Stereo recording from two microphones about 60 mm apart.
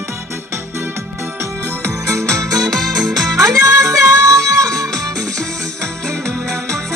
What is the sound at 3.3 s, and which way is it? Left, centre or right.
Music, right.